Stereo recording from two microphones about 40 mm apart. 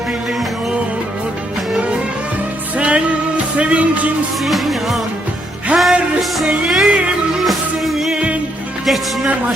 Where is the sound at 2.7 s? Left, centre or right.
Right.